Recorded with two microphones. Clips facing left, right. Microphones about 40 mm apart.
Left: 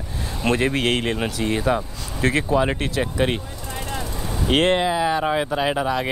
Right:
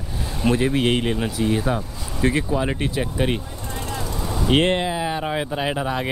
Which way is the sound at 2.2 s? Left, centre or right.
Left.